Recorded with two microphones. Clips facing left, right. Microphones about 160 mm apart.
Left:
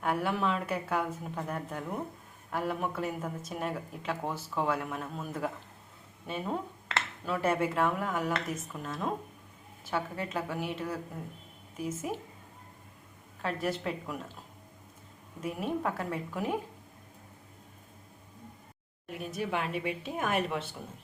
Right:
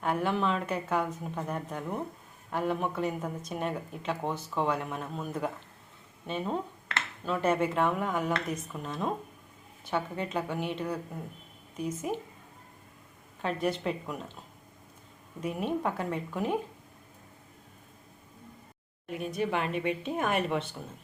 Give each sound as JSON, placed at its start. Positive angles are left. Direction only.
{"t": 0.0, "sound": "a woman's voice", "side_deg": 5}
{"t": 6.2, "sound": "a sound", "side_deg": 5}
{"t": 7.4, "sound": "a woman's voice", "side_deg": 5}
{"t": 13.4, "sound": "a woman's voice", "side_deg": 0}
{"t": 15.4, "sound": "a woman's voice", "side_deg": 0}
{"t": 19.0, "sound": "a woman's voice", "side_deg": 0}